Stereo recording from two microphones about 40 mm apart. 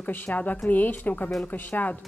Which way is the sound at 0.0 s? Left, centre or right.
Left.